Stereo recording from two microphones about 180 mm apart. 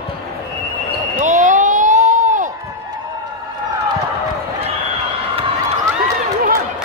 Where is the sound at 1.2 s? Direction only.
45° right (ahead or behind).